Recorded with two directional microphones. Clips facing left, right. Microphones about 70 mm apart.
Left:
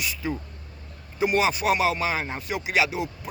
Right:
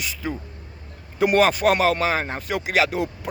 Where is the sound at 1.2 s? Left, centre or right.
Right.